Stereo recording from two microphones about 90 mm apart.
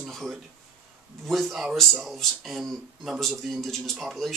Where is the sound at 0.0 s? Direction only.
Centre (ahead or behind).